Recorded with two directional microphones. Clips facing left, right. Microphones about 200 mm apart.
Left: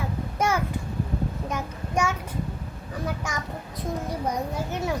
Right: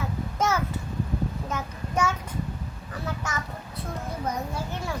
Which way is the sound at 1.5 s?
10° left (ahead or behind).